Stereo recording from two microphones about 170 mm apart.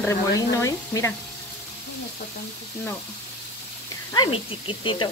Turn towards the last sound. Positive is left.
turn(degrees=30)  # may be behind; listen again after turning